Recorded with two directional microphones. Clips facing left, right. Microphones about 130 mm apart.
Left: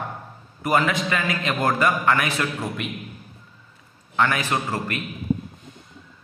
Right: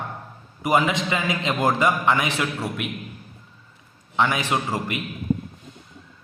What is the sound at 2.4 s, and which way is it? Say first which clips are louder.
Speech: even; 10° right (ahead or behind).